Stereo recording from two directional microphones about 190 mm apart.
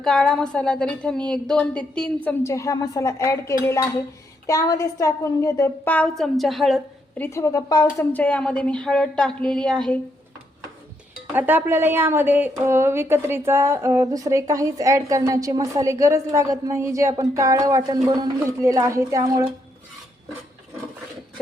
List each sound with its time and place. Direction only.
0.0 s a woman's voice: 5° left (ahead or behind)
7.3 s a woman's voice: 15° left (ahead or behind)
11.3 s a woman's voice: 10° right (ahead or behind)